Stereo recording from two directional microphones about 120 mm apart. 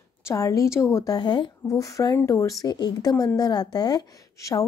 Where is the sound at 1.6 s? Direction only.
25° left (ahead or behind).